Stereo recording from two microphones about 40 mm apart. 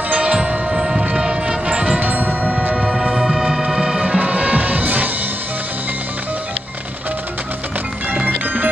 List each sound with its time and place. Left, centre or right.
0.1 s music: right
0.7 s a sound: centre
1.7 s music: right
3.0 s music: centre
4.0 s music: right
4.3 s music: right